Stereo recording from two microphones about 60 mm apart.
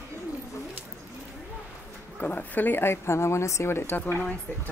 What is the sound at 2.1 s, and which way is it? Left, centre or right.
A woman's voice, left.